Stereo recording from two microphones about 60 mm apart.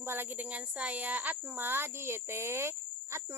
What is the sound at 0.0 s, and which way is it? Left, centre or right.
Speech, right.